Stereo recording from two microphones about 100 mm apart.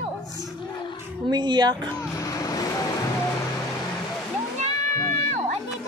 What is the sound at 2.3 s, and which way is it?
Vehicle, 35° left (ahead or behind).